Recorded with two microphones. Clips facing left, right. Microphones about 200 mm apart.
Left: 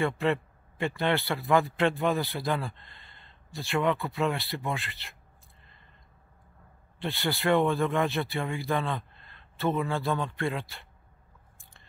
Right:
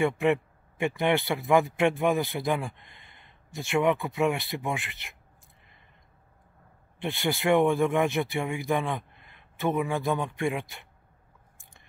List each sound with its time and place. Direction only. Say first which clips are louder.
0.0 s a man's voice: right 3 dB; 15° right (ahead or behind)
7.0 s speech: right 2 dB; 20° right (ahead or behind)